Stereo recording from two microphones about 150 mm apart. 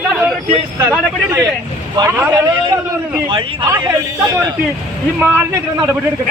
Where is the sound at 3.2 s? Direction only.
35° right (ahead or behind).